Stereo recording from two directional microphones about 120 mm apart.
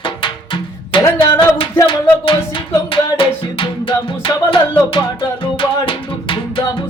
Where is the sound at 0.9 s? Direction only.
45° left (ahead or behind).